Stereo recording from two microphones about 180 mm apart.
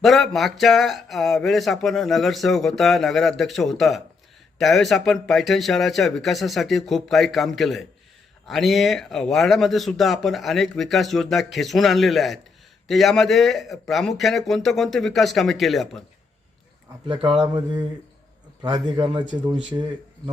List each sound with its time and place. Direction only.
0.0 s speech: centre (ahead or behind)
17.1 s speech: 30° right (ahead or behind)